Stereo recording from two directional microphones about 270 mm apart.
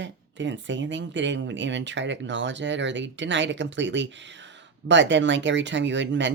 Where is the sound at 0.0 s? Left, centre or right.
Right.